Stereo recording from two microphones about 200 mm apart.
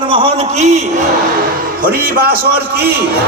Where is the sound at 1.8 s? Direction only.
45° right (ahead or behind).